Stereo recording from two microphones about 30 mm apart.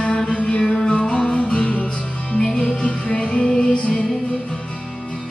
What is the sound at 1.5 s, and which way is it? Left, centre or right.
Music, left.